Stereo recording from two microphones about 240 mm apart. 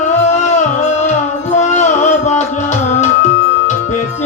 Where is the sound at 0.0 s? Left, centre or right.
Left.